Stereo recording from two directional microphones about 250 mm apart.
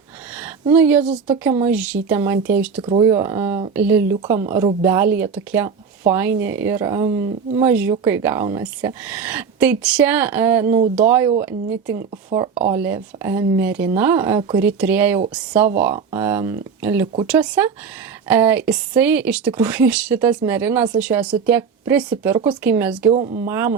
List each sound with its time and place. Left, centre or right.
0.7 s speech: centre
23.1 s speech: right
23.5 s speech: centre